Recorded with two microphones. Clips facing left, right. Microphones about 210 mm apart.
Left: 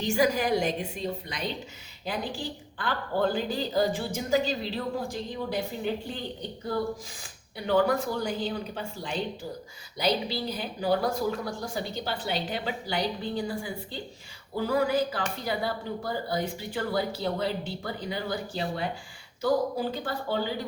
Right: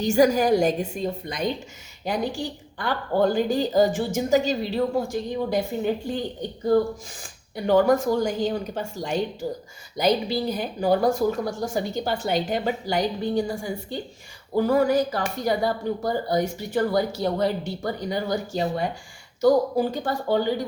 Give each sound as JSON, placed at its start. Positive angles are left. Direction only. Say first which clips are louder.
{"t": 0.0, "sound": "speech", "louder": "right 6 dB", "side_deg": -45}